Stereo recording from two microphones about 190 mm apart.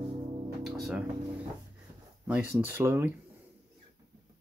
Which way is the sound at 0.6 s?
Centre (ahead or behind).